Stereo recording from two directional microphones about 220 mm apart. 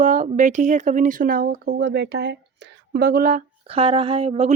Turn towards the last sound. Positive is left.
turn(degrees=-30)  # may be behind; listen again after turning